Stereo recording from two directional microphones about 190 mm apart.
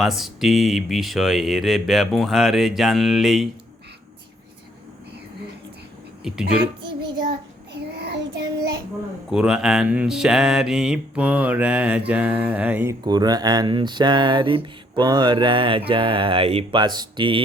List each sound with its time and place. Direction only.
0.0 s speech: centre (ahead or behind)
6.2 s speech: 5° right (ahead or behind)
7.9 s child singing: 60° right (ahead or behind)
9.3 s speech: 5° right (ahead or behind); by 17.4 s 25° right (ahead or behind)